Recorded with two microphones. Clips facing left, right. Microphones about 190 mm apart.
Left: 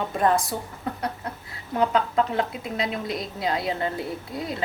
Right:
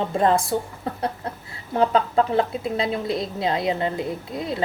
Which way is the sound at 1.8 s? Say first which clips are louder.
Right 3 dB; 30° right (ahead or behind).